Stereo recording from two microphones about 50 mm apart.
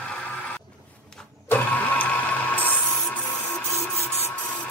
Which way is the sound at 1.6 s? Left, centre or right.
Left.